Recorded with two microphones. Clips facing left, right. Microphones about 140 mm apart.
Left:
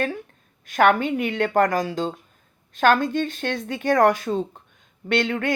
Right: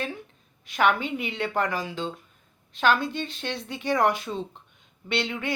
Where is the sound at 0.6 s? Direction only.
50° left (ahead or behind).